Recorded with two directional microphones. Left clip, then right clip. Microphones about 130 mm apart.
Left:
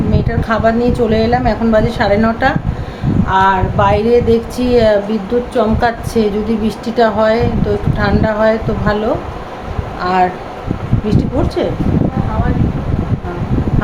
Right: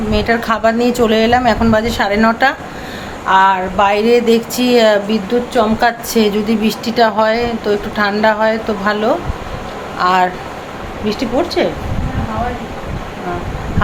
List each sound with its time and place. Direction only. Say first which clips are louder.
0.1 s speech: right 5 dB; 10° left (ahead or behind)
5.3 s speech: even; 20° left (ahead or behind)
6.1 s speech: right 1 dB; 5° left (ahead or behind)
10.0 s speech: right 1 dB; centre (ahead or behind)
11.2 s speech: right 3 dB; 20° left (ahead or behind)